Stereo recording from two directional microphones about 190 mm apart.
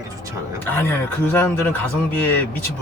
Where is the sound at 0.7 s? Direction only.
10° left (ahead or behind).